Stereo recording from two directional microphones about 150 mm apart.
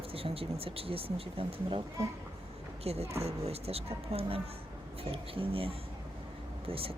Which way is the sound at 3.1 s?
45° right (ahead or behind).